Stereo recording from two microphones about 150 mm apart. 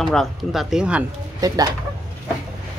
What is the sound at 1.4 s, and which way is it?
Speech, 25° right (ahead or behind).